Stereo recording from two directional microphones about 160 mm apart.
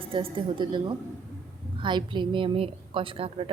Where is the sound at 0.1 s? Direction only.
35° right (ahead or behind).